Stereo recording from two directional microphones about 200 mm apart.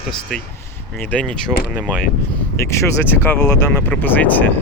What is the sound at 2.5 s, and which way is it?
Speech, 15° left (ahead or behind).